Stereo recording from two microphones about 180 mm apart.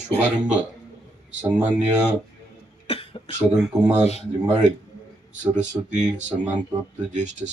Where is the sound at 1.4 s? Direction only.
10° right (ahead or behind).